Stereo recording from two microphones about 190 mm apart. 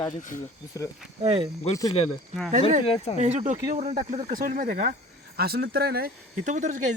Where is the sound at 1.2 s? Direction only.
30° right (ahead or behind).